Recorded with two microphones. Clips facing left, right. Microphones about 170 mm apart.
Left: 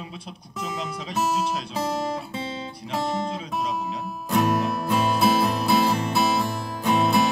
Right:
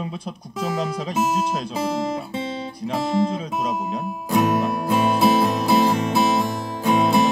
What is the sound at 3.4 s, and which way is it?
Speech, 45° right (ahead or behind).